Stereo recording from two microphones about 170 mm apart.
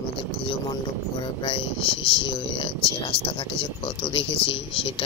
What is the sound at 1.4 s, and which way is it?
Speech, 30° left (ahead or behind).